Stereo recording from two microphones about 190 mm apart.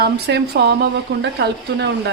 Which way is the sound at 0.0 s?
60° right (ahead or behind).